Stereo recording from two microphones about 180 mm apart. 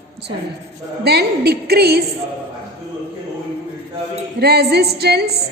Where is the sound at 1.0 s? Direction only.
60° right (ahead or behind).